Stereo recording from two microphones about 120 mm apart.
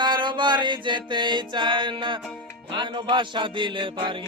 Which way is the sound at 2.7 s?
40° right (ahead or behind).